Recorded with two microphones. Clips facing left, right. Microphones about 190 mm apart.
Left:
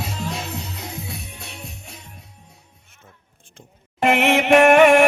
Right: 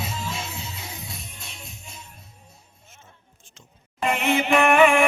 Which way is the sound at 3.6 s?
80° left.